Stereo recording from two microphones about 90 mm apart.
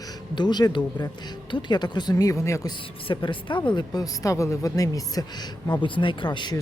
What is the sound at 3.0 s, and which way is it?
Speech, 65° left (ahead or behind).